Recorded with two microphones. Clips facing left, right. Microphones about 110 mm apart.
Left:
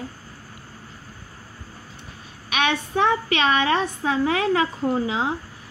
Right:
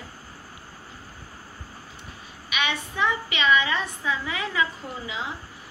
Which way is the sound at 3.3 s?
75° left (ahead or behind).